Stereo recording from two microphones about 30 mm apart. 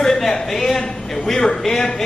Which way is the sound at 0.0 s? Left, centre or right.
Centre.